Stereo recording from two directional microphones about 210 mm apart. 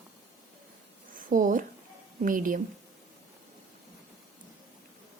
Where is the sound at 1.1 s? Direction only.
40° right (ahead or behind).